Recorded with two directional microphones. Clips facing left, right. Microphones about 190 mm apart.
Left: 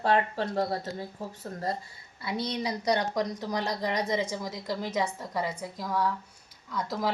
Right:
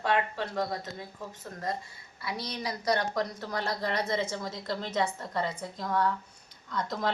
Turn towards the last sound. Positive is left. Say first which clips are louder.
# left 1 dB
turn(degrees=5)  # may be behind; listen again after turning